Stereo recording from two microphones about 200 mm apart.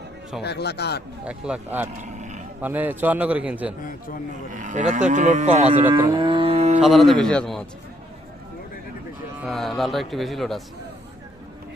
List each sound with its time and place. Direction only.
0.4 s speech: 55° left (ahead or behind)
1.2 s speech: 5° right (ahead or behind)
2.0 s roaring cats: 35° right (ahead or behind)
2.6 s a man's voice: 10° right (ahead or behind)
3.8 s a man's voice: 45° left (ahead or behind)
4.5 s cattle: 35° right (ahead or behind)
5.9 s cattle: 25° right (ahead or behind)
6.8 s speech: centre (ahead or behind)
9.4 s speech: centre (ahead or behind)